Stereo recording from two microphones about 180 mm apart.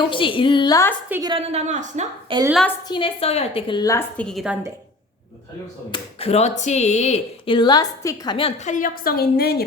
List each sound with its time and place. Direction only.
0.0 s a woman's voice: 30° left (ahead or behind)
1.2 s a woman's voice: 30° right (ahead or behind)
2.3 s a woman's voice: 30° right (ahead or behind)
2.9 s a woman's voice: 30° left (ahead or behind)
4.2 s a woman's voice: centre (ahead or behind)
5.9 s speech: 35° left (ahead or behind)
8.7 s a woman's voice: 50° left (ahead or behind)